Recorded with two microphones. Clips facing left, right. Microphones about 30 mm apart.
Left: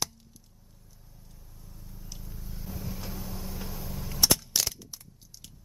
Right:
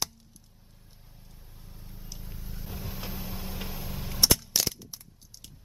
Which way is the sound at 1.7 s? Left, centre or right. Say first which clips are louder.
Even; right.